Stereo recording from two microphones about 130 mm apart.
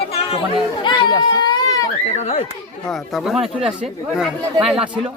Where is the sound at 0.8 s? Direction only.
35° left (ahead or behind).